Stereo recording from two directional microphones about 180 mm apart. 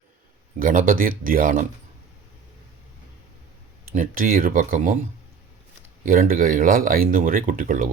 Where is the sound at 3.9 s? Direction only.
50° right (ahead or behind).